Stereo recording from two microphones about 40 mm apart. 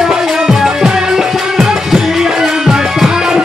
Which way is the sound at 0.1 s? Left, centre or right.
Centre.